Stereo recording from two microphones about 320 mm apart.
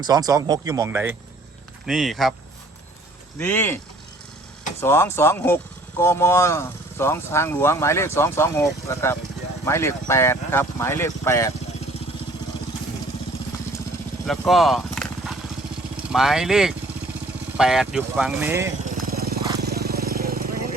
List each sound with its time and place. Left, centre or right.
0.0 s speech: centre
3.3 s speech: centre
4.8 s speech: centre
14.3 s speech: centre
16.1 s speech: centre
18.9 s vehicle: right